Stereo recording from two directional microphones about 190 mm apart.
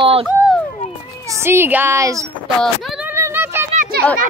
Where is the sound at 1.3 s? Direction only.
15° right (ahead or behind).